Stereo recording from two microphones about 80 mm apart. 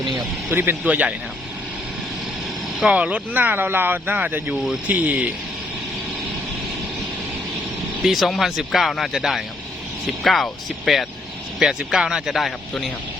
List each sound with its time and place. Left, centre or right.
0.5 s speech: right
2.8 s speech: centre
8.0 s speech: centre